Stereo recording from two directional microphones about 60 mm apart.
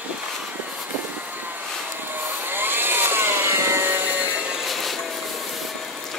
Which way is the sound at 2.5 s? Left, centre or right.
Right.